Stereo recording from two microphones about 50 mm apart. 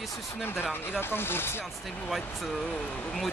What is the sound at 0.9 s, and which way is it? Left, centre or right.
Speech, left.